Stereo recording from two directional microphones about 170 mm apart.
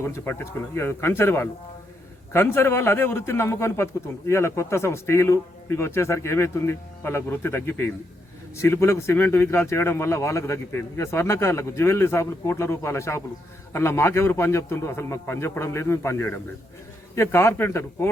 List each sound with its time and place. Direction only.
0.0 s speech: 15° left (ahead or behind)